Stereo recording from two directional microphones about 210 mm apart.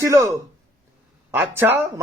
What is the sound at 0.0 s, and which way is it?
A man's voice, 15° right (ahead or behind).